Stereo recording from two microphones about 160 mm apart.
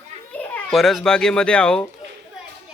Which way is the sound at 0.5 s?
Centre (ahead or behind).